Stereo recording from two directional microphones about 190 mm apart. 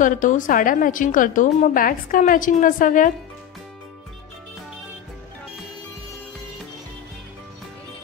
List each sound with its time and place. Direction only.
0.0 s a woman's voice: 45° left (ahead or behind)